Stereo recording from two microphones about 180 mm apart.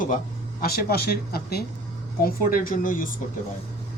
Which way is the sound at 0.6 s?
55° left (ahead or behind).